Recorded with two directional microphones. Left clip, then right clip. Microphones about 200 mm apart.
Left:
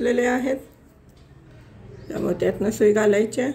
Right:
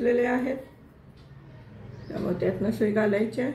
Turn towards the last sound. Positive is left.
turn(degrees=55)  # may be behind; listen again after turning